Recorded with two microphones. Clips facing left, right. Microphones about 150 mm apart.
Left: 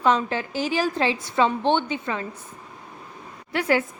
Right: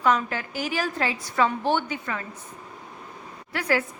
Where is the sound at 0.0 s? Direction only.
25° left (ahead or behind).